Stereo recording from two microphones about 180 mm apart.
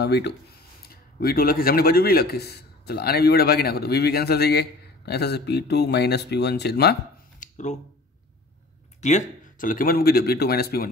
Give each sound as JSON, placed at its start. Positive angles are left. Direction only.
{"t": 0.0, "sound": "speech", "side_deg": 65}
{"t": 7.3, "sound": "a sound", "side_deg": 45}
{"t": 9.0, "sound": "speech", "side_deg": 40}
{"t": 9.6, "sound": "speech", "side_deg": 50}